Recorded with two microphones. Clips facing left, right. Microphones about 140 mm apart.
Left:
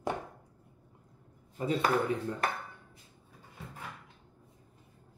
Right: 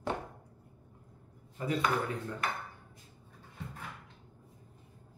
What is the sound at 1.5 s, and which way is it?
Speech, 25° left (ahead or behind).